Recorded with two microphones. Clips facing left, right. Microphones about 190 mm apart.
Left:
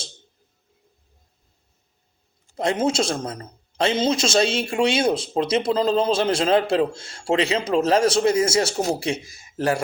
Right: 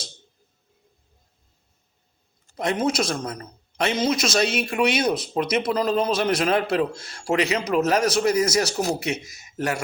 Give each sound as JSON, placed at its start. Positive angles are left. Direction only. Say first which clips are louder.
{"t": 2.6, "sound": "speech", "louder": "left 2 dB", "side_deg": 30}